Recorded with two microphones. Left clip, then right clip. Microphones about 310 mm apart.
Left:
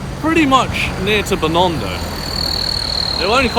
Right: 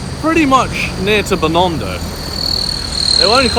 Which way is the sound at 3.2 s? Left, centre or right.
Centre.